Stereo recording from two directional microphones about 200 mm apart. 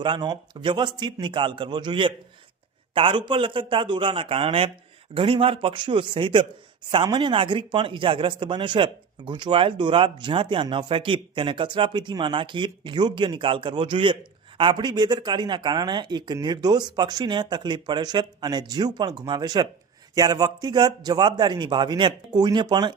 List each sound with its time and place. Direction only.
0.0 s speech: 20° right (ahead or behind)